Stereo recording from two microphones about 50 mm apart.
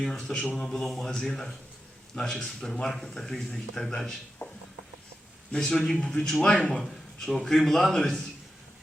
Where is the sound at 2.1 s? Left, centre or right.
Left.